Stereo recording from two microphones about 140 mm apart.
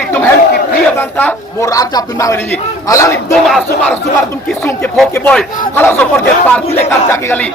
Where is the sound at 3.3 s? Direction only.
Centre (ahead or behind).